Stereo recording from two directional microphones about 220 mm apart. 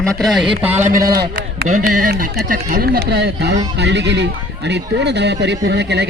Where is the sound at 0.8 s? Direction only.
35° right (ahead or behind).